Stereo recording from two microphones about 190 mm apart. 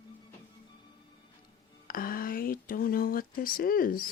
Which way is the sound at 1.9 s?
50° left (ahead or behind).